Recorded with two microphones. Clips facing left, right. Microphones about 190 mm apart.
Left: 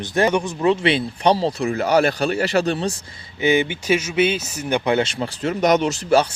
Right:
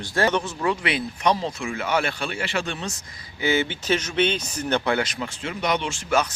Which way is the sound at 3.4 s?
15° left (ahead or behind).